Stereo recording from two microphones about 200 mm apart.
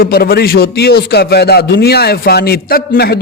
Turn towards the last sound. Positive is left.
turn(degrees=50)  # may be behind; listen again after turning